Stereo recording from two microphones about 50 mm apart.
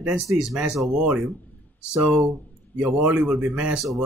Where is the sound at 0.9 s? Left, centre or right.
Centre.